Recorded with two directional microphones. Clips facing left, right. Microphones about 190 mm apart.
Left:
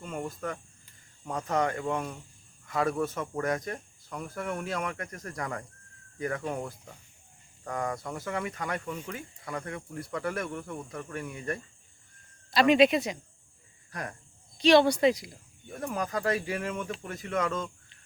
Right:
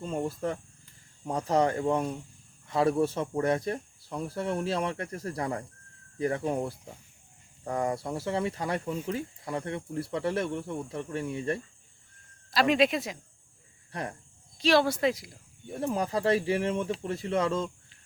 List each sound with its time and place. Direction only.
0.0 s speech: 30° right (ahead or behind)
12.5 s speech: centre (ahead or behind)
13.9 s speech: 25° right (ahead or behind)
14.6 s speech: centre (ahead or behind)
15.7 s speech: 30° right (ahead or behind)